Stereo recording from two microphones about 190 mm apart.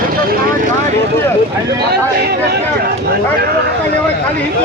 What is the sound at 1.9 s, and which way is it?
Crowd, 55° right (ahead or behind).